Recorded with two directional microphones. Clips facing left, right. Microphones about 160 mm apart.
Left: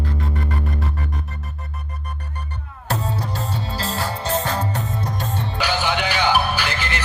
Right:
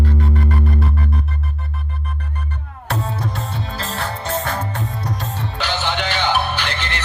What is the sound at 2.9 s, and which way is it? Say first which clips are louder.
Music: right 1 dB; 35° left (ahead or behind).